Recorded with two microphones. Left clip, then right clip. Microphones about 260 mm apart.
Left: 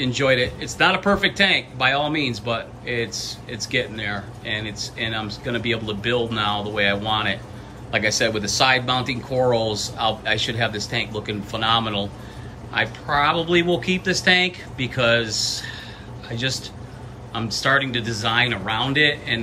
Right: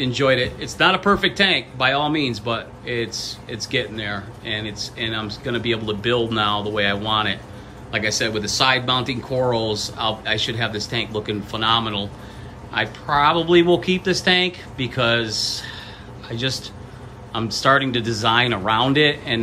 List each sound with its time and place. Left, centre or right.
0.0 s a man's voice: centre